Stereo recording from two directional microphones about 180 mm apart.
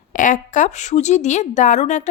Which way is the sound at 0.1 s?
45° left (ahead or behind).